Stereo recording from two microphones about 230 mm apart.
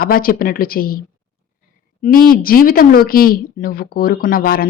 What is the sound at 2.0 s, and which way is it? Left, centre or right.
Speech, left.